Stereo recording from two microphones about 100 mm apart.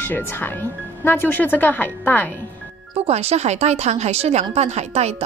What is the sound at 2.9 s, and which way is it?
Speech, 90° right.